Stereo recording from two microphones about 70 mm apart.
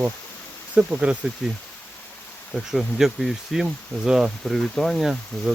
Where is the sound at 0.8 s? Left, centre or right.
Centre.